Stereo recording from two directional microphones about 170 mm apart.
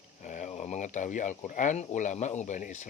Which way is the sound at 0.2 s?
45° left (ahead or behind).